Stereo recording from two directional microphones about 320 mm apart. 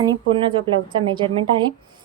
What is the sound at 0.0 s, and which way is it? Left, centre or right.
A woman's voice, centre.